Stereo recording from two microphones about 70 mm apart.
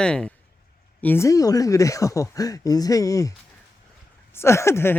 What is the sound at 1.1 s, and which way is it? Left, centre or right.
A man's voice, left.